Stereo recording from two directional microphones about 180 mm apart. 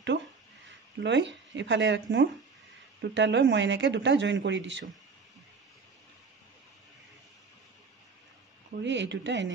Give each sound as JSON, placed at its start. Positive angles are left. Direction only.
{"t": 0.7, "sound": "a sound", "side_deg": -85}
{"t": 1.5, "sound": "speech", "side_deg": -90}
{"t": 8.8, "sound": "speech", "side_deg": -90}